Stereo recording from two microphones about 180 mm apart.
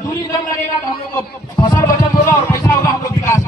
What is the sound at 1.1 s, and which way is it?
Music, 20° left (ahead or behind).